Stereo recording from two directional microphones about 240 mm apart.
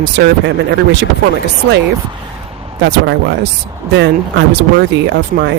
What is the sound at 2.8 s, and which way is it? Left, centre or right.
Speech, right.